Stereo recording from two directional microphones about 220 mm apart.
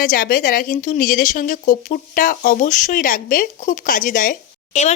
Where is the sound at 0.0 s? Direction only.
40° left (ahead or behind).